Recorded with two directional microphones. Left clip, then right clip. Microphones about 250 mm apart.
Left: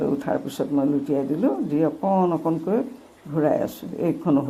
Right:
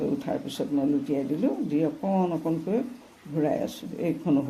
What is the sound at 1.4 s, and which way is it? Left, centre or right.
A man's voice, centre.